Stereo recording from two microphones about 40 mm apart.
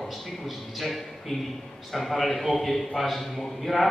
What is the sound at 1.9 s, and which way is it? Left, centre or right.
A man's voice, centre.